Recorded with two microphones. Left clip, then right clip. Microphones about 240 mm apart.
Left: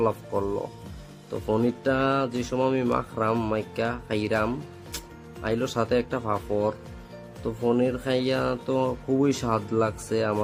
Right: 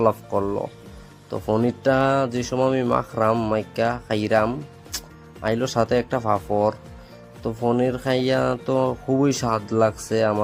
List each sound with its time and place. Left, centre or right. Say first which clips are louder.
0.0 s speech: right 5 dB; right